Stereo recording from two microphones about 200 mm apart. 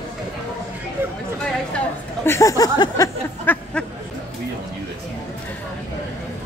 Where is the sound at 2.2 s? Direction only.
15° left (ahead or behind).